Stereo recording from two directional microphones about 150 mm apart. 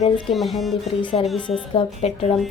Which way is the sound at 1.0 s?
35° left (ahead or behind).